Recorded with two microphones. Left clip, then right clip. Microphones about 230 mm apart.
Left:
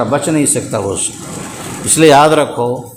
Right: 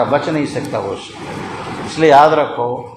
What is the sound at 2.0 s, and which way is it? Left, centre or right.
Speech, left.